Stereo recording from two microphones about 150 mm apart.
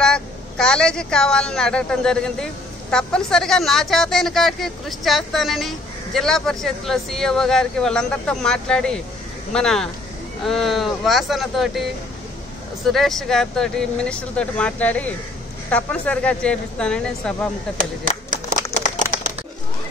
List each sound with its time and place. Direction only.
0.0 s a woman's voice: 5° left (ahead or behind)
12.8 s a woman's voice: centre (ahead or behind)
17.7 s a sound: 65° right (ahead or behind)